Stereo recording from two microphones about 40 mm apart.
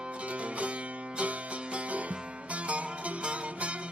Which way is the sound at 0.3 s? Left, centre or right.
Right.